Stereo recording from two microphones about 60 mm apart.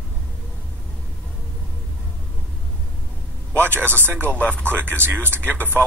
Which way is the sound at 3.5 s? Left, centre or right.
Right.